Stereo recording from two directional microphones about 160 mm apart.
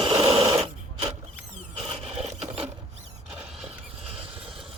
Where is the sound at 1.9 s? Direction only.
40° right (ahead or behind).